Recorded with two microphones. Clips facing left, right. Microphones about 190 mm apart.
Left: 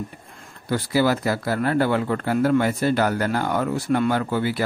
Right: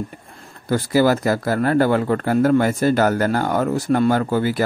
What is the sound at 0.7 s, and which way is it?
Speech, 45° right (ahead or behind).